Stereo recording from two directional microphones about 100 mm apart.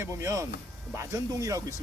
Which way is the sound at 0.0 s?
30° right (ahead or behind).